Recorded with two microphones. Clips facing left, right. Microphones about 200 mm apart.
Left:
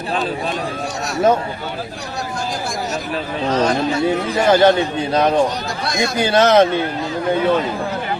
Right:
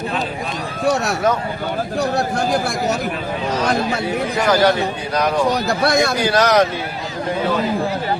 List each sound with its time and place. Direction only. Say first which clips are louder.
2.0 s a man's voice: right 7 dB; 60° right (ahead or behind)
4.4 s speech: left 3 dB; 25° left (ahead or behind)
5.8 s a man's voice: right 4 dB; 60° right (ahead or behind)
6.1 s speech: left 2 dB; 25° left (ahead or behind)